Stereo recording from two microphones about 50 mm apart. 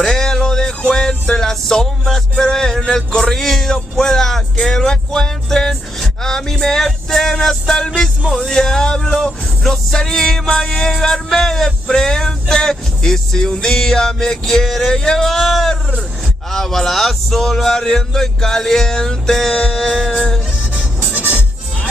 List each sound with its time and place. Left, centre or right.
0.0 s music: centre
21.1 s music: right